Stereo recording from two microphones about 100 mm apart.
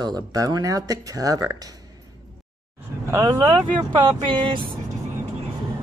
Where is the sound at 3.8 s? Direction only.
50° right (ahead or behind).